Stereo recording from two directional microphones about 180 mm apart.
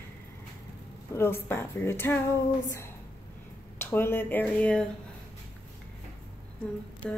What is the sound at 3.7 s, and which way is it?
Speech, 15° left (ahead or behind).